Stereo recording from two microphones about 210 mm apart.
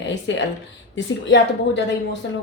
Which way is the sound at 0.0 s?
60° left (ahead or behind).